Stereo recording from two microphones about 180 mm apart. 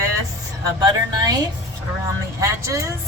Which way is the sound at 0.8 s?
20° right (ahead or behind).